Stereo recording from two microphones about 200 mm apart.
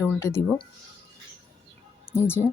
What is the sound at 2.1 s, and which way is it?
Speech, 10° left (ahead or behind).